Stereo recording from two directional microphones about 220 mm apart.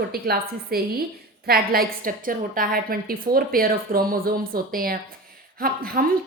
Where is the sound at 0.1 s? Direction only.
45° right (ahead or behind).